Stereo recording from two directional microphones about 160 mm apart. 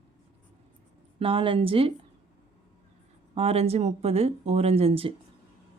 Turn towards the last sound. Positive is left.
turn(degrees=-35)  # may be behind; listen again after turning